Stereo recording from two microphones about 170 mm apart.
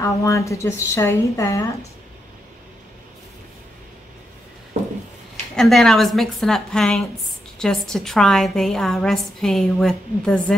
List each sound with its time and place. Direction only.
0.0 s a woman's voice: 15° left (ahead or behind)
5.6 s a woman's voice: 5° left (ahead or behind)